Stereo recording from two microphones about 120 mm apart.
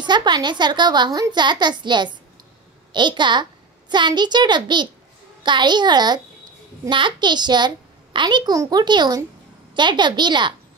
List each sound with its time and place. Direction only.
0.0 s a child's voice: 40° right (ahead or behind)